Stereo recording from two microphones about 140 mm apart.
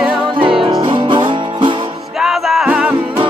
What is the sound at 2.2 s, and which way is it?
Music, centre (ahead or behind).